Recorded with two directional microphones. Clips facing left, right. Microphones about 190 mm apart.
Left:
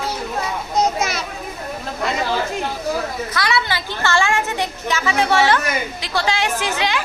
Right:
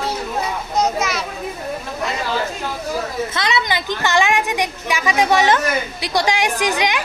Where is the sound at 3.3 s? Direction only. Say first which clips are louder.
Left 1 dB; 20° right (ahead or behind).